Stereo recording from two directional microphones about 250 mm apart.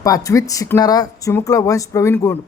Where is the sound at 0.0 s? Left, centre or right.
Centre.